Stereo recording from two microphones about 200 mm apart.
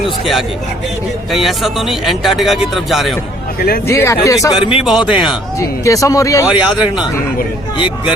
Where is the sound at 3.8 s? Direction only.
15° left (ahead or behind).